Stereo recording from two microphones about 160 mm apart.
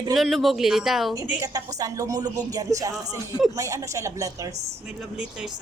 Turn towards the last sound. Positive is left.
turn(degrees=-5)  # may be behind; listen again after turning